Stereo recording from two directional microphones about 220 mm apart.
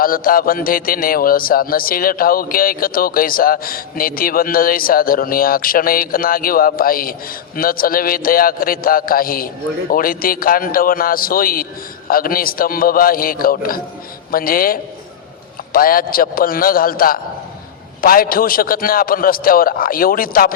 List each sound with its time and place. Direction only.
0.0 s a man's voice: 40° left (ahead or behind)